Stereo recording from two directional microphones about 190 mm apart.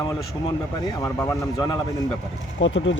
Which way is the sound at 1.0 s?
15° left (ahead or behind).